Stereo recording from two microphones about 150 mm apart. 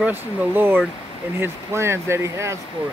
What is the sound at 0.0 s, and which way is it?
Speech, 15° right (ahead or behind).